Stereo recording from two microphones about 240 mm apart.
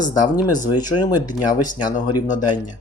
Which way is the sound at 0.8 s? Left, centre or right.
Centre.